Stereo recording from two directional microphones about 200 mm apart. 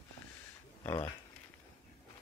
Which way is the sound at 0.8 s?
15° left (ahead or behind).